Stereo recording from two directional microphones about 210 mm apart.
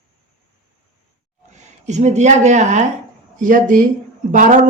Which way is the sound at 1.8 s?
35° right (ahead or behind).